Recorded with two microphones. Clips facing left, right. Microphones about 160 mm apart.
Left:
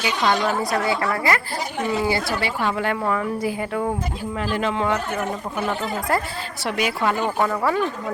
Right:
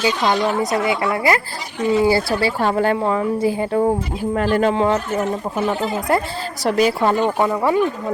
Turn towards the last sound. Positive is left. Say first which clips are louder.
# right 4 dB
turn(degrees=-20)  # may be behind; listen again after turning